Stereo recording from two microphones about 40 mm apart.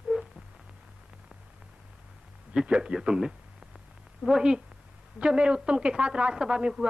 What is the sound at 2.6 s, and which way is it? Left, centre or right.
A man's voice, right.